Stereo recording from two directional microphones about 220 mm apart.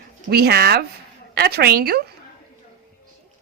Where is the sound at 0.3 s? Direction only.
45° right (ahead or behind).